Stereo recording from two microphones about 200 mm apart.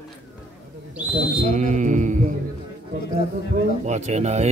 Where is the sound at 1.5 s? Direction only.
40° right (ahead or behind).